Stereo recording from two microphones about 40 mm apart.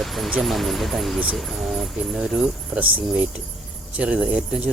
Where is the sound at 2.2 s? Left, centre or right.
Centre.